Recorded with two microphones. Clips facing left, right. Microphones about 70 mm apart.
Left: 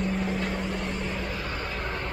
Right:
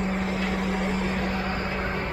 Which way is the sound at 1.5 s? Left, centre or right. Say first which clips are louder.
Right 4 dB; centre.